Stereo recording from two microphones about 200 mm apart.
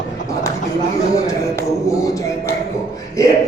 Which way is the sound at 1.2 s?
15° left (ahead or behind).